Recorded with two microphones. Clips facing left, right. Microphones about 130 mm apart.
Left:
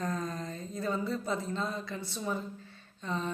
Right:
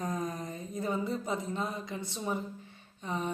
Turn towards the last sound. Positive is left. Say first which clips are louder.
# even
turn(degrees=-15)  # may be behind; listen again after turning